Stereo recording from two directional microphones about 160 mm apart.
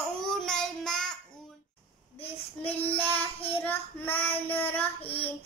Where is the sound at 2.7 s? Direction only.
40° left (ahead or behind).